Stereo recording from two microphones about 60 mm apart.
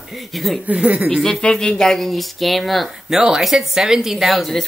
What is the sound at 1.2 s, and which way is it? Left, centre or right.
Speech, centre.